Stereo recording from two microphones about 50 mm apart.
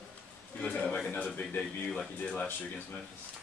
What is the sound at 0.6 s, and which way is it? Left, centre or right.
Speech, left.